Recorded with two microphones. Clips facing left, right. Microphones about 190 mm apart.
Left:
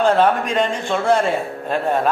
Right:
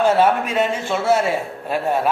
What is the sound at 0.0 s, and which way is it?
A man's voice, 5° right (ahead or behind).